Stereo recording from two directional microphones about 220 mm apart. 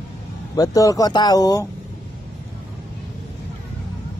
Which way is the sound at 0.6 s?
15° left (ahead or behind).